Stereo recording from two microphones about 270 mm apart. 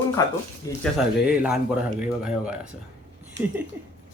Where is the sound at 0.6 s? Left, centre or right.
Centre.